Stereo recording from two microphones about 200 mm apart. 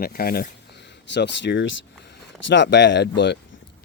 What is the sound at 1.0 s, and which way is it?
Speech, 60° left (ahead or behind).